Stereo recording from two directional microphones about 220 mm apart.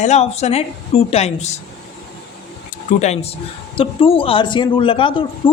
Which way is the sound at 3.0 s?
30° left (ahead or behind).